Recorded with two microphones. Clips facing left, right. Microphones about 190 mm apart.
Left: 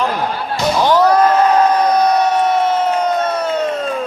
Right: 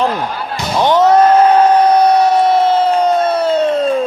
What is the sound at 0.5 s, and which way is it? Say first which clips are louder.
Slam: right 1 dB; 20° right (ahead or behind).